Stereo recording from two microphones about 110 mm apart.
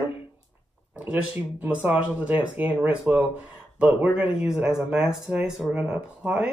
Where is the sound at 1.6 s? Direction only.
15° right (ahead or behind).